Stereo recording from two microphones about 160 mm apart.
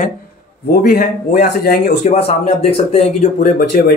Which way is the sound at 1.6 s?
90° left.